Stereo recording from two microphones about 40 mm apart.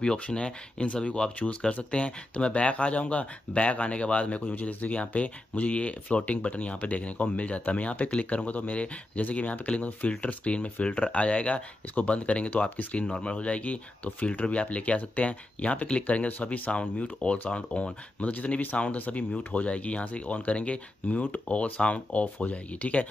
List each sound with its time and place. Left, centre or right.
0.0 s speech: left
12.4 s speech: left
12.9 s speech: left